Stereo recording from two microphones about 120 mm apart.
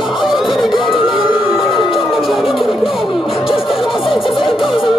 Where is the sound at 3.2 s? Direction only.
50° left (ahead or behind).